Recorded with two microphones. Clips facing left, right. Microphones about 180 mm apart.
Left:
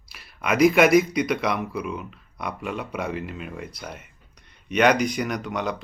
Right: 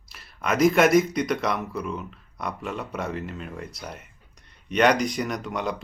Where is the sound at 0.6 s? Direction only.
Centre (ahead or behind).